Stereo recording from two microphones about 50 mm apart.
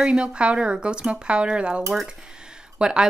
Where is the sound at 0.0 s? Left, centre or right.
Centre.